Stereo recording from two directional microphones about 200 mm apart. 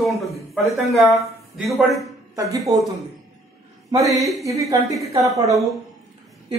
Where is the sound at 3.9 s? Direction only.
15° right (ahead or behind).